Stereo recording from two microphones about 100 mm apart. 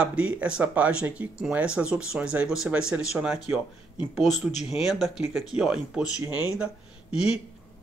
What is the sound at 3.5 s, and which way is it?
Speech, 20° right (ahead or behind).